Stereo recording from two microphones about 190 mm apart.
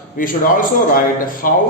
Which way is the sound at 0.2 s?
45° left (ahead or behind).